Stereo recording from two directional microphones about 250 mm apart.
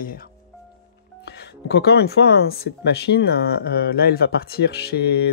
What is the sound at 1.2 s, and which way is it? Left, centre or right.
Speech, left.